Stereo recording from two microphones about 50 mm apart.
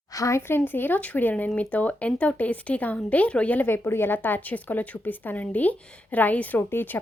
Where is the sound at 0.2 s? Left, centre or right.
Left.